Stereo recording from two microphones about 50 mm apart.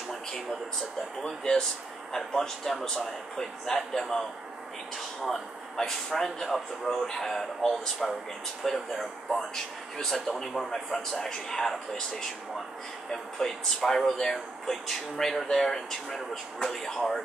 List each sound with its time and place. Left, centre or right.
1.2 s speech: centre
5.2 s a man's voice: centre
9.9 s a man's voice: centre